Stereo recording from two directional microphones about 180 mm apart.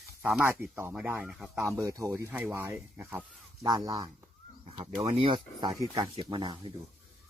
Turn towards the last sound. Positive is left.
turn(degrees=-25)  # may be behind; listen again after turning